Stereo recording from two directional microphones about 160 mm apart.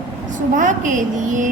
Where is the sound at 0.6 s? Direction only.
55° right (ahead or behind).